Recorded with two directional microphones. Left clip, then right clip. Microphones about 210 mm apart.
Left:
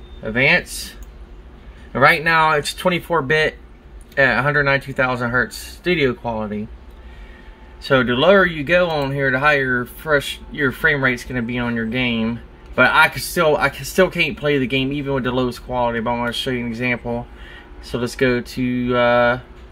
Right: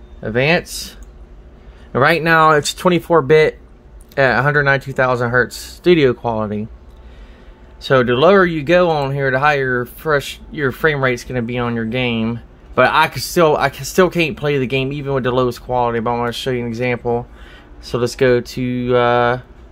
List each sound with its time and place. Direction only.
0.2 s speech: 55° right (ahead or behind)
7.8 s speech: 60° right (ahead or behind)